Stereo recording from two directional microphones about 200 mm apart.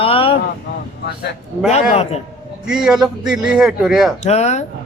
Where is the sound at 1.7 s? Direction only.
35° left (ahead or behind).